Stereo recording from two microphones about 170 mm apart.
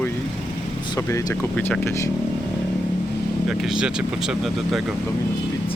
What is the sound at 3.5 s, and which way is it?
Speech, 5° right (ahead or behind).